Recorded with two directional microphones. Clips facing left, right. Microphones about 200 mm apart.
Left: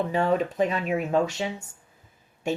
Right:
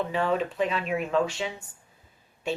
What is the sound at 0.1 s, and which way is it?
Speech, 45° left (ahead or behind).